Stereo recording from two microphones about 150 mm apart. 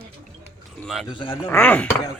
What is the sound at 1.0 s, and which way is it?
Speech, 35° left (ahead or behind).